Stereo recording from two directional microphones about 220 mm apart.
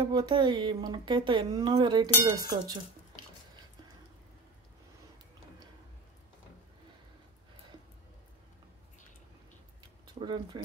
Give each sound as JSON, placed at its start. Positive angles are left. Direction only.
{"t": 0.0, "sound": "speech", "side_deg": -20}
{"t": 10.2, "sound": "speech", "side_deg": -20}